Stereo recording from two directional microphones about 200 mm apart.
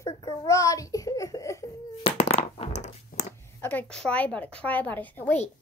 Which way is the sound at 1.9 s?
30° left (ahead or behind).